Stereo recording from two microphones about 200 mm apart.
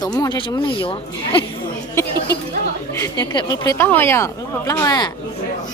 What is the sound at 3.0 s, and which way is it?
Speech, 20° left (ahead or behind).